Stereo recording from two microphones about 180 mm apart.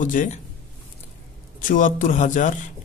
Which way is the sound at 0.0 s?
45° left (ahead or behind).